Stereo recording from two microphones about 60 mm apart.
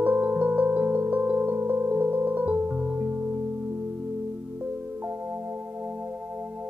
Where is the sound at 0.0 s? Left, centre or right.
Right.